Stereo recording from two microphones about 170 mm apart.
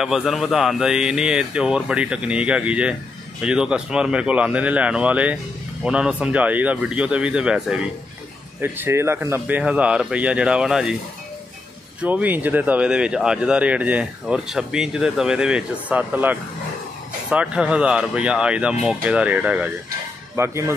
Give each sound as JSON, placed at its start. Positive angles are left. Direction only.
{"t": 0.0, "sound": "speech", "side_deg": 0}
{"t": 12.0, "sound": "speech", "side_deg": -10}